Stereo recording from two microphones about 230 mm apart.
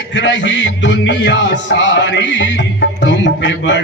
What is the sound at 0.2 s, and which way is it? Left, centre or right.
Music, left.